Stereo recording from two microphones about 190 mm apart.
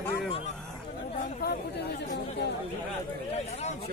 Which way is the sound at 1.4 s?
60° left (ahead or behind).